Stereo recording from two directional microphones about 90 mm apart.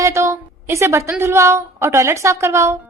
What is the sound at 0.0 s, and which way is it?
A woman's voice, 35° right (ahead or behind).